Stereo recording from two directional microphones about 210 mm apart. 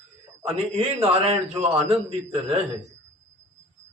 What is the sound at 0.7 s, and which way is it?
A man's voice, 30° right (ahead or behind).